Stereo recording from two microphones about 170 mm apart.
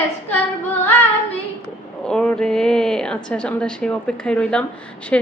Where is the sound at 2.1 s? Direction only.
5° left (ahead or behind).